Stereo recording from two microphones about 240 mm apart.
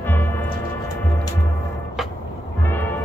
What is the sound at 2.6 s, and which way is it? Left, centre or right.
Music, centre.